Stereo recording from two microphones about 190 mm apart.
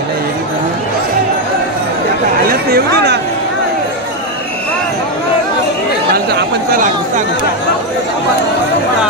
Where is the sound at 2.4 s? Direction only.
55° right (ahead or behind).